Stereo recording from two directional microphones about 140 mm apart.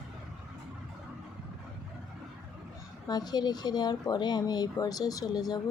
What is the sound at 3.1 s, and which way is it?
Speech, 30° left (ahead or behind).